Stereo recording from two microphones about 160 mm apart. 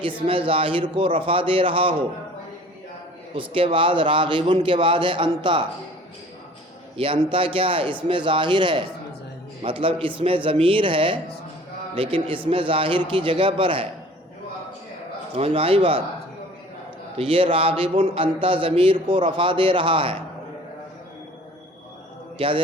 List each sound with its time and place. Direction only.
0.3 s a man's voice: 35° right (ahead or behind)
3.3 s a man's voice: 35° right (ahead or behind)
6.9 s a man's voice: 35° right (ahead or behind)
15.4 s a man's voice: 40° right (ahead or behind)
17.2 s a man's voice: 35° right (ahead or behind)
22.4 s a man's voice: 35° right (ahead or behind)